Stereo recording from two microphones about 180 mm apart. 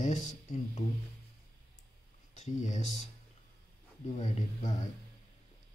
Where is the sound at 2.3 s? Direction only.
40° left (ahead or behind).